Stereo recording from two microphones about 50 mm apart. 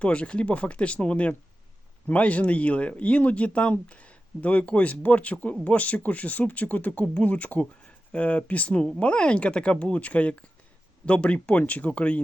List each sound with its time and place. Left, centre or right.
0.0 s speech: left